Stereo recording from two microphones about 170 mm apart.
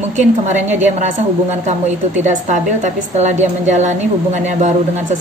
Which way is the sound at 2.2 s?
45° right (ahead or behind).